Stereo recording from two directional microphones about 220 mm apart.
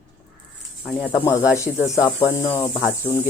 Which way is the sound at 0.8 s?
10° left (ahead or behind).